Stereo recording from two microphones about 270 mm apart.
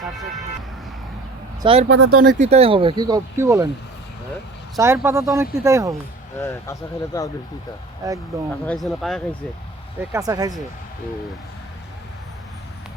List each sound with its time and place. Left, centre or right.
1.6 s speech: right
1.9 s speech: right
2.2 s speech: right
4.8 s speech: centre
6.4 s speech: centre
8.6 s speech: centre
10.0 s speech: centre